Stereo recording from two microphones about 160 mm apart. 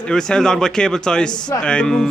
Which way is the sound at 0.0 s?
5° left (ahead or behind).